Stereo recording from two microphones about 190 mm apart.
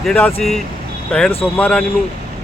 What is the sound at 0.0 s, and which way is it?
Speech, 5° left (ahead or behind).